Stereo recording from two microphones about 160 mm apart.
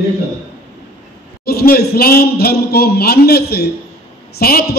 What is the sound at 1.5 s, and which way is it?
A man's voice, 75° left (ahead or behind).